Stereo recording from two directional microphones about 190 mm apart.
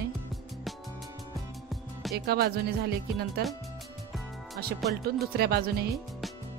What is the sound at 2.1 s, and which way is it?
Speech, 55° right (ahead or behind).